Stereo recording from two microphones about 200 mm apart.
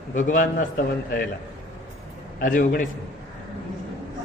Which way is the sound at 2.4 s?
40° left (ahead or behind).